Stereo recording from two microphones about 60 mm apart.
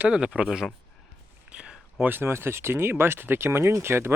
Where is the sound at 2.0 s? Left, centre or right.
Right.